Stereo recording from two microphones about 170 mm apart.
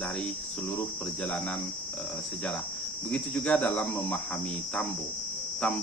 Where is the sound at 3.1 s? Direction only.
5° left (ahead or behind).